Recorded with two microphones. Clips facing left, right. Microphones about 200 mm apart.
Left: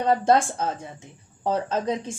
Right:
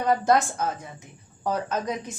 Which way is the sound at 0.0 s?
30° left (ahead or behind).